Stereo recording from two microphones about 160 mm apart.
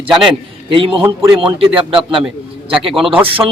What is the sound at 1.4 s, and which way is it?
Speech, 35° right (ahead or behind).